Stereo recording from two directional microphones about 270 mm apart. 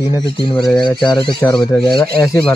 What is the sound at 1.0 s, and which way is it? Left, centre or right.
Speech, centre.